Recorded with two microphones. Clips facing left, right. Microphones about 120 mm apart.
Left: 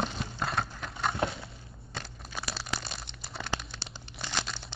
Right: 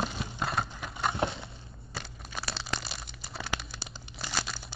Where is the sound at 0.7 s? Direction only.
5° right (ahead or behind).